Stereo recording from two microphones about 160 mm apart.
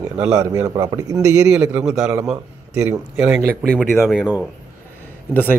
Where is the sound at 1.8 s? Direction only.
Centre (ahead or behind).